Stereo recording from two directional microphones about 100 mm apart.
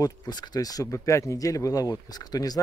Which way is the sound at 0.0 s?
45° left (ahead or behind).